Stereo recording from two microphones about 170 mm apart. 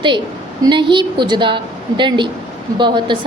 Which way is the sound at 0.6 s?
30° right (ahead or behind).